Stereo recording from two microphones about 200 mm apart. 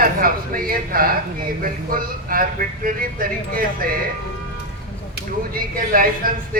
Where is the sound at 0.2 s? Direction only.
45° right (ahead or behind).